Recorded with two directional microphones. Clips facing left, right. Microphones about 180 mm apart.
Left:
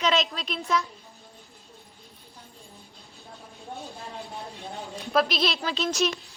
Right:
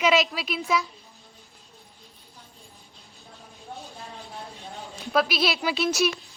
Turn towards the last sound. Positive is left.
turn(degrees=-10)  # may be behind; listen again after turning